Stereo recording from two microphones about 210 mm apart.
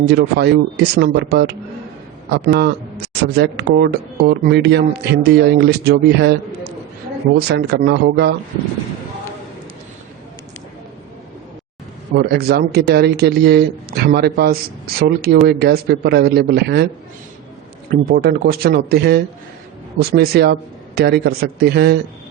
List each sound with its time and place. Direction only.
0.1 s speech: 55° right (ahead or behind)
12.1 s speech: 50° right (ahead or behind)
18.1 s speech: 50° right (ahead or behind)